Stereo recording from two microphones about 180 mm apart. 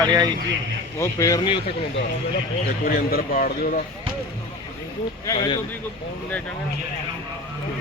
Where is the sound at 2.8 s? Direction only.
55° left (ahead or behind).